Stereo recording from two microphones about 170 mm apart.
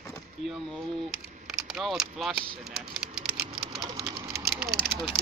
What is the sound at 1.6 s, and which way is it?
Speech, centre (ahead or behind).